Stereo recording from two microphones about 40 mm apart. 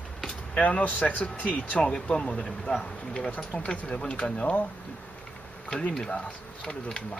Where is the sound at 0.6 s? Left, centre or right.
Left.